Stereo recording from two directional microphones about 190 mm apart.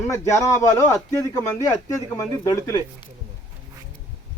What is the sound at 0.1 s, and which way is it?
Speech, 15° left (ahead or behind).